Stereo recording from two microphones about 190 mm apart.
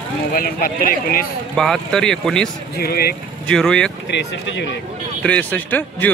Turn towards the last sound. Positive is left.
turn(degrees=10)  # may be behind; listen again after turning